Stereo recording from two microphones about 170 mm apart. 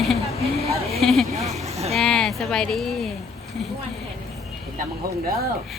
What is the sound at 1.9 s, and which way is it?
Speech, 5° left (ahead or behind).